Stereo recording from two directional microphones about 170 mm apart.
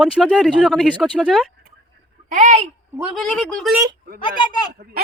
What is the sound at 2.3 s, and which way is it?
Speech, 45° right (ahead or behind).